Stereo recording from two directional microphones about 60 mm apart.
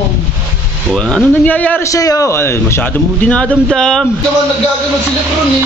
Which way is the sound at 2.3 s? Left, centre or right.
Left.